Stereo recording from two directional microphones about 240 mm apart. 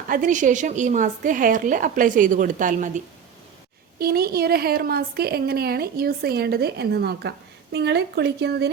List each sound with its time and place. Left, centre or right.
0.1 s a woman's voice: right